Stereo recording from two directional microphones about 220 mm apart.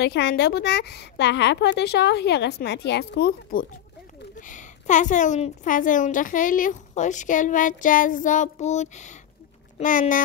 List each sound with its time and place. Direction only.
0.0 s a woman's voice: 45° left (ahead or behind)
4.5 s a woman's voice: 35° left (ahead or behind)